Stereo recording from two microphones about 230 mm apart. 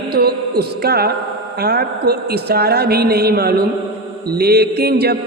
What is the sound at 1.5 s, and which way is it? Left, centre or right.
Mantra, right.